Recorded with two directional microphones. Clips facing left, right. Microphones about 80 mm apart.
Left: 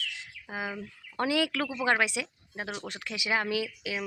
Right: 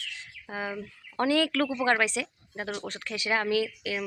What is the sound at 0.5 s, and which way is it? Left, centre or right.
Speech, centre.